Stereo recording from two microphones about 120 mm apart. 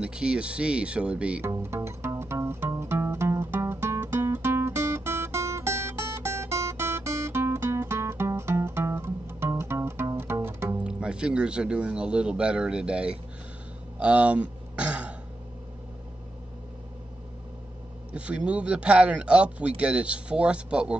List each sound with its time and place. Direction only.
0.0 s speech: 10° right (ahead or behind)
1.4 s music: 20° right (ahead or behind)
10.8 s speech: 10° right (ahead or behind)
13.9 s throat clearing: 10° right (ahead or behind)
18.1 s speech: 10° right (ahead or behind)